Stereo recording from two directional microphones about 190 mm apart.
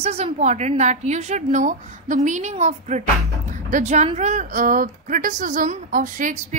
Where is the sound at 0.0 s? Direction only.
35° right (ahead or behind).